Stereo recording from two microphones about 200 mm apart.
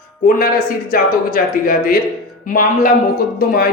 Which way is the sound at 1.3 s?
40° left (ahead or behind).